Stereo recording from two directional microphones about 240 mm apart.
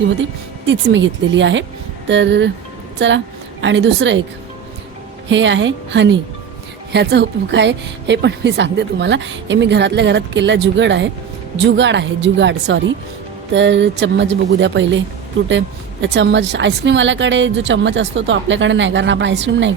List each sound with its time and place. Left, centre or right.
0.6 s a woman's voice: right
5.3 s a woman's voice: right